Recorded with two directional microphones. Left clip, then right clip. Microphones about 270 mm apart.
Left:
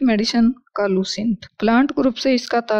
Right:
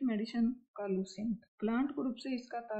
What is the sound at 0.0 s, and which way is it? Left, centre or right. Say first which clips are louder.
Speech: left 18 dB; left.